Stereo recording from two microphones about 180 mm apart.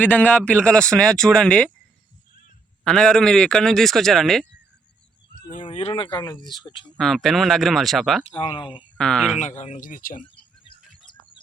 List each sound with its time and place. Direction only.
0.0 s speech: 10° left (ahead or behind)
2.8 s speech: 5° left (ahead or behind)
5.6 s speech: 30° left (ahead or behind)
6.9 s speech: centre (ahead or behind)
8.2 s speech: 30° left (ahead or behind)
9.0 s speech: 5° left (ahead or behind)
9.4 s speech: 40° left (ahead or behind)
10.7 s bird: 25° left (ahead or behind)